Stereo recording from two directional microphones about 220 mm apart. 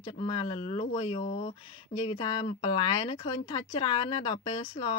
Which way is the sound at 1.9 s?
45° left (ahead or behind).